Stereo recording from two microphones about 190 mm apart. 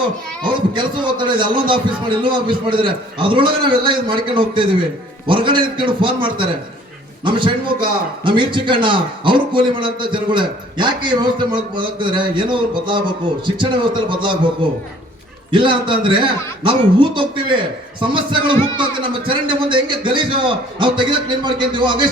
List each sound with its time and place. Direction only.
0.4 s a man's voice: 25° right (ahead or behind)
15.5 s a man's voice: 25° right (ahead or behind)